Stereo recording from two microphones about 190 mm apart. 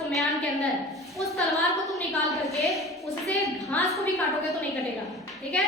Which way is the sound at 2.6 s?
Centre (ahead or behind).